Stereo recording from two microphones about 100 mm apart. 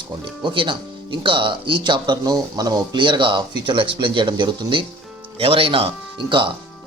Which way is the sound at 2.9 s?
55° right (ahead or behind).